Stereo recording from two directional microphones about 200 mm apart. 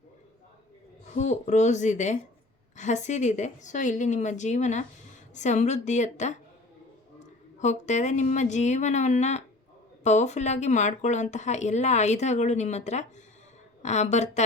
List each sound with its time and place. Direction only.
1.1 s speech: 35° left (ahead or behind)
7.6 s speech: 35° left (ahead or behind)